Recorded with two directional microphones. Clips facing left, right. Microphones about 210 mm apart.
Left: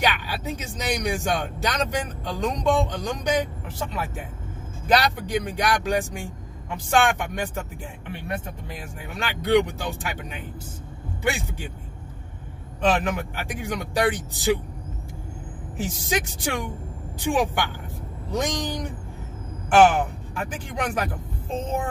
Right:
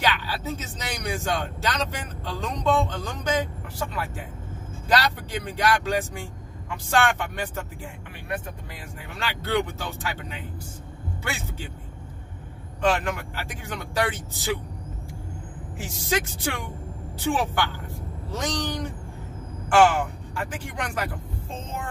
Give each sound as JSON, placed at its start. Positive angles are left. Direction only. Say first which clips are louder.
{"t": 0.0, "sound": "speech", "louder": "left 1 dB", "side_deg": 15}
{"t": 4.8, "sound": "speech", "louder": "left 2 dB", "side_deg": 15}
{"t": 9.2, "sound": "speech", "louder": "left 6 dB", "side_deg": 15}
{"t": 11.2, "sound": "speech", "louder": "left 8 dB", "side_deg": 15}
{"t": 12.8, "sound": "speech", "louder": "left 2 dB", "side_deg": 20}
{"t": 15.8, "sound": "speech", "louder": "left 1 dB", "side_deg": 15}